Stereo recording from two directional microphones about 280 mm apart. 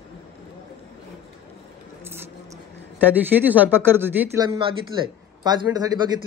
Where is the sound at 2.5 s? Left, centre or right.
Centre.